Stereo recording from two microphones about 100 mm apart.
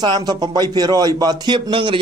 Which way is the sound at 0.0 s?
45° right (ahead or behind).